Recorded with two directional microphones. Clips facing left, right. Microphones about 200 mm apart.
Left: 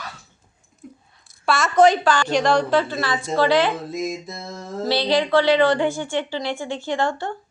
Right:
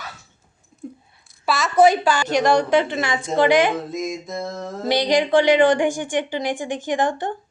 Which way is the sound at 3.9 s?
Centre (ahead or behind).